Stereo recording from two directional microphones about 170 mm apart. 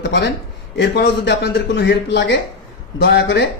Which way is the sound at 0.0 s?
80° left.